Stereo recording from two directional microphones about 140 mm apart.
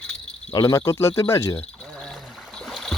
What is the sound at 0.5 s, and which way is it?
Speech, 25° left (ahead or behind).